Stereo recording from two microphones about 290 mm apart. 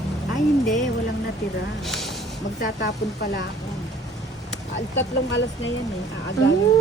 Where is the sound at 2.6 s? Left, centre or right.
Left.